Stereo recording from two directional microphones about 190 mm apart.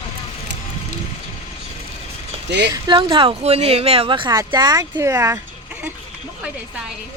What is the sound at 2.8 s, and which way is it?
Speech, 25° right (ahead or behind).